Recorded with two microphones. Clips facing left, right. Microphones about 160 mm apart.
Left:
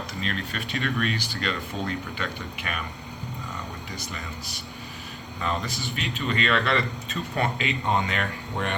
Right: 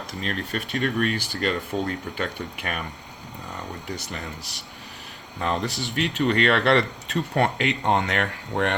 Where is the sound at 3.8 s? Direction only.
65° right (ahead or behind).